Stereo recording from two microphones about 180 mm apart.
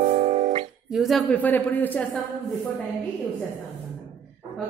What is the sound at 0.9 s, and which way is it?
Speech, centre (ahead or behind).